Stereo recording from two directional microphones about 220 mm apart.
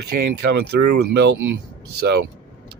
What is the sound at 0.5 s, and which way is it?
Speech, 50° right (ahead or behind).